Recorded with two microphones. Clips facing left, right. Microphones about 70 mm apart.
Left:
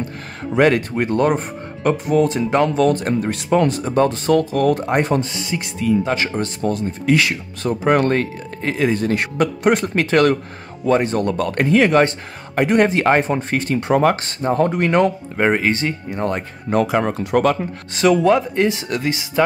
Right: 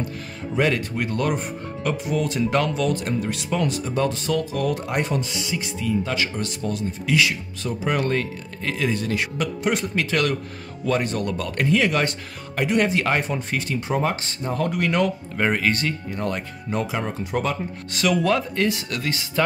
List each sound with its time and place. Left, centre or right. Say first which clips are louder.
0.6 s speech: left 7 dB; left
2.3 s speech: left 5 dB; left
2.8 s speech: left 7 dB; left
6.0 s speech: left 5 dB; left
10.9 s speech: left 6 dB; left
13.8 s speech: left 9 dB; left
14.4 s speech: left 7 dB; left
16.7 s speech: left 8 dB; left
17.9 s speech: left 6 dB; left